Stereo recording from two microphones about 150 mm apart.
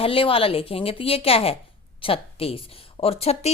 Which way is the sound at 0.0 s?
35° left (ahead or behind).